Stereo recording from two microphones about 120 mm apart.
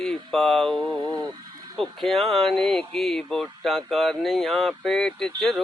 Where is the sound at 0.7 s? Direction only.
40° right (ahead or behind).